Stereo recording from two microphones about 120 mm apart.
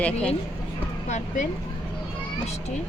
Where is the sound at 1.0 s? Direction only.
75° left (ahead or behind).